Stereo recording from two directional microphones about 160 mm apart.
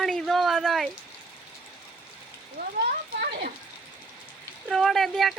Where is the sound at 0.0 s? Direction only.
Centre (ahead or behind).